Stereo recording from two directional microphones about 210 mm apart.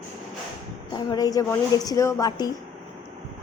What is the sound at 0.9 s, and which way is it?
A woman's voice, 20° left (ahead or behind).